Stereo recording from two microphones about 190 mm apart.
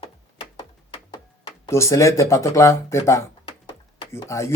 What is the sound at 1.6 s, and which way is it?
Speech, 15° left (ahead or behind).